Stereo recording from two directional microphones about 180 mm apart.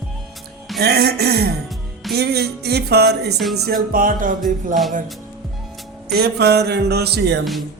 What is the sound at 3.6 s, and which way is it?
Music, 50° right (ahead or behind).